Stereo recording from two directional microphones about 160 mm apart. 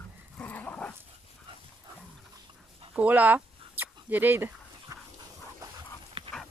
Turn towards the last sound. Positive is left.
turn(degrees=-35)  # may be behind; listen again after turning